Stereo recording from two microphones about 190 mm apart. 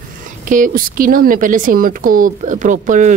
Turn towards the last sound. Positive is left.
turn(degrees=-40)  # may be behind; listen again after turning